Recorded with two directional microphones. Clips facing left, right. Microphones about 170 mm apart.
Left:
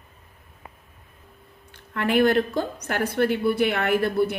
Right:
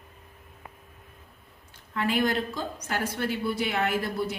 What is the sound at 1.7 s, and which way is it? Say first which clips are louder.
A woman's voice: left 5 dB; 60° left (ahead or behind).